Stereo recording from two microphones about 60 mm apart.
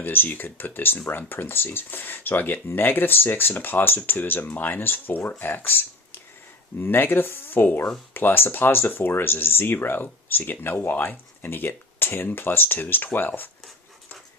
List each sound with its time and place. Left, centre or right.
0.0 s speech: left